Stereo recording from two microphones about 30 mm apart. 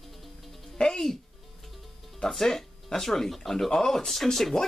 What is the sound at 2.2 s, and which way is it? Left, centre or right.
Speech, centre.